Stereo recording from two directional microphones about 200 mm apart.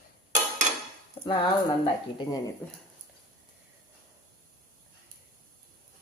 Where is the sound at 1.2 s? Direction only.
30° left (ahead or behind).